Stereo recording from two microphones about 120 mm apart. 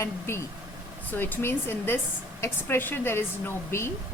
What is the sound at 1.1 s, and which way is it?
A woman's voice, 15° left (ahead or behind).